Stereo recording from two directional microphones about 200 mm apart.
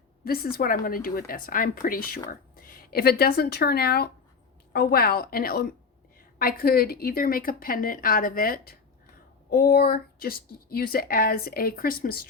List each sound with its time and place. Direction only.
0.3 s a woman's voice: 50° left (ahead or behind)